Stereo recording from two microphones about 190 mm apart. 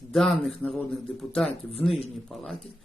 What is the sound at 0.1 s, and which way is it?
Speech, centre (ahead or behind).